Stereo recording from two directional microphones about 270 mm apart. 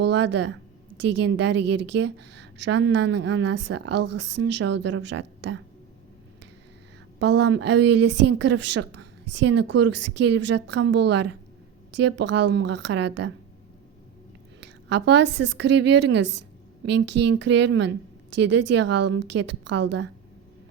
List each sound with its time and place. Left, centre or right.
0.0 s a woman's voice: right
7.2 s a woman's voice: right
7.9 s a woman's voice: right
8.2 s a woman's voice: right
14.6 s a woman's voice: right